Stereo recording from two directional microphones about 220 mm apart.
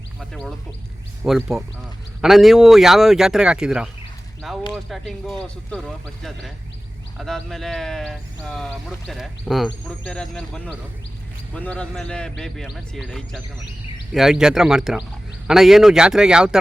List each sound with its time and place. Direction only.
0.2 s a sound: centre (ahead or behind)
1.2 s speech: centre (ahead or behind)
7.2 s speech: centre (ahead or behind)